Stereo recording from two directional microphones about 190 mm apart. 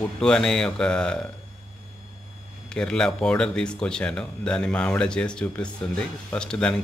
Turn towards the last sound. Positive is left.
turn(degrees=5)  # may be behind; listen again after turning